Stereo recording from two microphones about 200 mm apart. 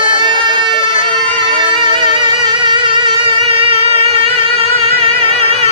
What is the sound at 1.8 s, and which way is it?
Music, 25° right (ahead or behind).